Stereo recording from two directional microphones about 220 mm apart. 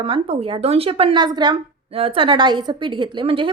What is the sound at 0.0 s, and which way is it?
Speech, 25° right (ahead or behind).